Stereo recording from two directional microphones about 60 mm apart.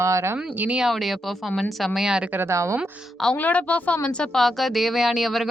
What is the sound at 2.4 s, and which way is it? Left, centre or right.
Speech, right.